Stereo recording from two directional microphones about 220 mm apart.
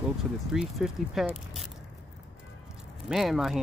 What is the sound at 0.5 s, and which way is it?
Speech, centre (ahead or behind).